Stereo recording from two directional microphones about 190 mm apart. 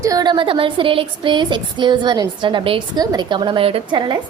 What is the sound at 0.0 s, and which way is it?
Speech, 20° right (ahead or behind).